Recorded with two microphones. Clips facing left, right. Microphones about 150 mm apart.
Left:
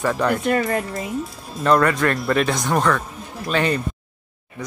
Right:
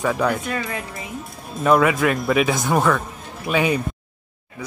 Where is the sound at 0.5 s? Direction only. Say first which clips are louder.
Left 7 dB; 50° left (ahead or behind).